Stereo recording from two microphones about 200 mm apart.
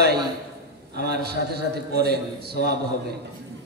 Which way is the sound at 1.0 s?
55° right (ahead or behind).